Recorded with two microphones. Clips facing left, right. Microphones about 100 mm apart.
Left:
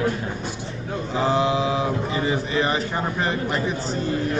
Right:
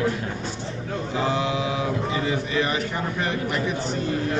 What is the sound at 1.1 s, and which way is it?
Speech, 35° left (ahead or behind).